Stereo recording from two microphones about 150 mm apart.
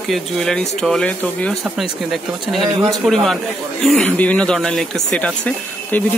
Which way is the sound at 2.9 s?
Centre (ahead or behind).